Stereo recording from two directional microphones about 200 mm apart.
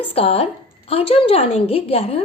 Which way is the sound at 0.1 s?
30° left (ahead or behind).